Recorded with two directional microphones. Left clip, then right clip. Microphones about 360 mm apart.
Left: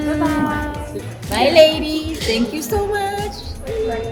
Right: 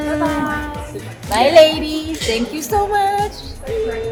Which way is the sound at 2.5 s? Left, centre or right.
Centre.